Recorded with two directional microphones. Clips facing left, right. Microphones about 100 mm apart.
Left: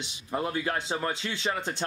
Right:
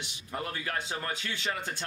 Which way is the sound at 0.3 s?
25° left (ahead or behind).